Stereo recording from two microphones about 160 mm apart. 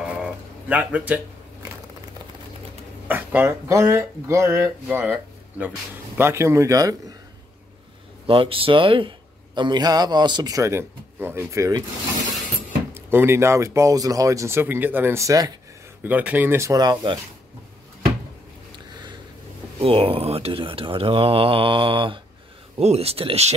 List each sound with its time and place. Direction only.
0.0 s a sound: 5° right (ahead or behind)
3.1 s speech: 10° right (ahead or behind)
8.3 s speech: 35° right (ahead or behind)
12.9 s speech: 15° right (ahead or behind)
16.0 s speech: 10° right (ahead or behind); by 17.2 s 25° right (ahead or behind)
19.8 s speech: 35° right (ahead or behind)